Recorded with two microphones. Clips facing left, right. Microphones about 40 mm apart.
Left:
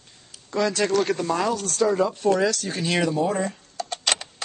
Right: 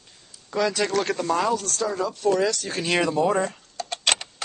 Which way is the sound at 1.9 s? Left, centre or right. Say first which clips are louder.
Left 2 dB; left.